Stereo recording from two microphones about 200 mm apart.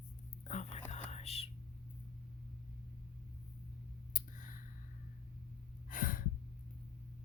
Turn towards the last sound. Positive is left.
turn(degrees=45)  # may be behind; listen again after turning